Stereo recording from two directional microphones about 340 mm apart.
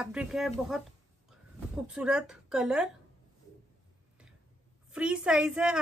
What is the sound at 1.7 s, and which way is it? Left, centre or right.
A woman's voice, centre.